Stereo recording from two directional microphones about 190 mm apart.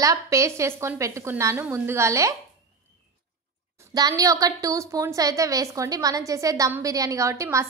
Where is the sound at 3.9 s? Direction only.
20° right (ahead or behind).